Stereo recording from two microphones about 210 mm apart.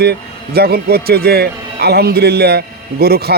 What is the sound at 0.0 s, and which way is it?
A man's voice, 50° right (ahead or behind).